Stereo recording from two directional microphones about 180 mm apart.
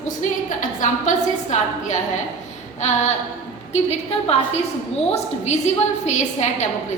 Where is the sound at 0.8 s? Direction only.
40° left (ahead or behind).